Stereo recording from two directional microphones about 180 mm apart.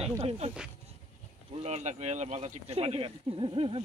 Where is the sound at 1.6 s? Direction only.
40° right (ahead or behind).